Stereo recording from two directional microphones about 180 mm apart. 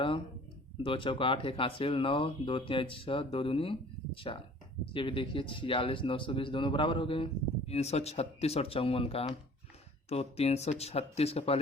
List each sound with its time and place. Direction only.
0.8 s speech: 30° left (ahead or behind)